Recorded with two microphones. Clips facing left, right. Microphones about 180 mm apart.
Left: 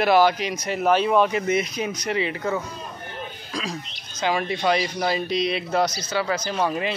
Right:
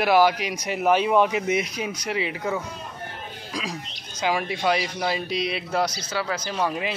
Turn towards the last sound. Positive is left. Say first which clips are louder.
# left 2 dB
turn(degrees=0)  # may be behind; listen again after turning